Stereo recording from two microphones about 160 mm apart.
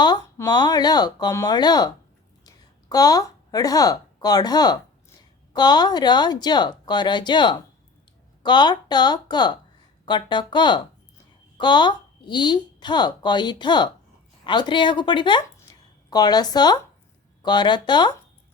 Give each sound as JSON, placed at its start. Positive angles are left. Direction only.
{"t": 0.0, "sound": "a woman's voice", "side_deg": 25}
{"t": 2.9, "sound": "a woman's voice", "side_deg": 25}